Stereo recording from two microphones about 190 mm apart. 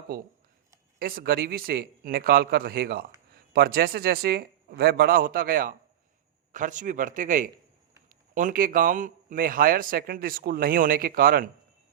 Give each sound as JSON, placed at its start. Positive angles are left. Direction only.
{"t": 0.9, "sound": "a man's voice", "side_deg": -50}